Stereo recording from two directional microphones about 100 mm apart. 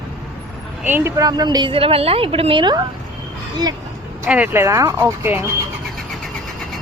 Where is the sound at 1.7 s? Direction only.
70° right (ahead or behind).